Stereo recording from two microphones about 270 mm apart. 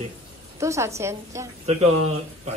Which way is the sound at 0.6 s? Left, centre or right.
Centre.